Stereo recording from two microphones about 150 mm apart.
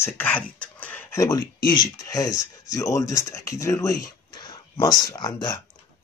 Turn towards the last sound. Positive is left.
turn(degrees=25)  # may be behind; listen again after turning